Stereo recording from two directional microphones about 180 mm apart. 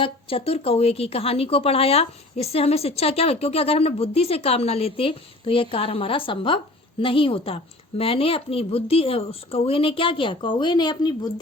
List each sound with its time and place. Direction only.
0.0 s speech: 30° left (ahead or behind)